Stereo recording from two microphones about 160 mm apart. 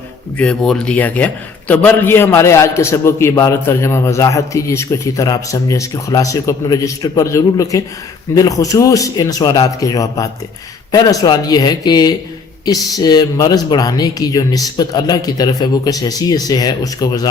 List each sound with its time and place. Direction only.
0.3 s a man's voice: 5° left (ahead or behind); by 17.2 s 25° left (ahead or behind)